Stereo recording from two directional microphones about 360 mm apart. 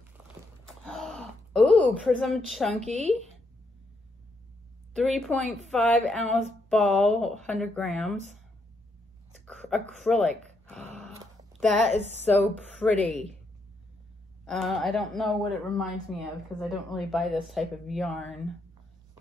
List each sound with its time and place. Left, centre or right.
0.7 s gasp: centre
4.9 s a woman's voice: centre
9.5 s a sound: centre
11.6 s a woman's voice: centre
12.9 s speech: centre
14.4 s a woman's voice: centre